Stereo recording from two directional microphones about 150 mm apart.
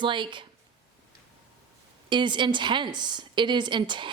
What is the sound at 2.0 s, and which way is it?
A woman's voice, 30° right (ahead or behind).